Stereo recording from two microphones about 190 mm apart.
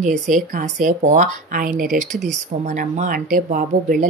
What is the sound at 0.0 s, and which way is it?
Speech, 40° right (ahead or behind).